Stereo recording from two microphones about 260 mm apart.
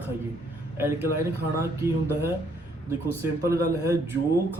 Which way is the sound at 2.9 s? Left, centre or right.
Centre.